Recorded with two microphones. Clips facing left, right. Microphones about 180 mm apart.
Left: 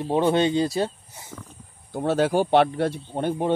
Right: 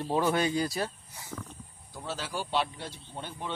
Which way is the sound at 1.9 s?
60° left (ahead or behind).